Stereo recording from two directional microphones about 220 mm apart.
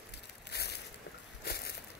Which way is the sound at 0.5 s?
50° left (ahead or behind).